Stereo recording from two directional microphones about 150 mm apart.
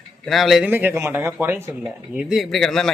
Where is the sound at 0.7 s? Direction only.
15° right (ahead or behind); by 2.8 s centre (ahead or behind).